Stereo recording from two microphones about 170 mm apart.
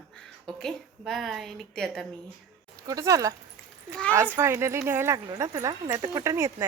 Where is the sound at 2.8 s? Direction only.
20° right (ahead or behind).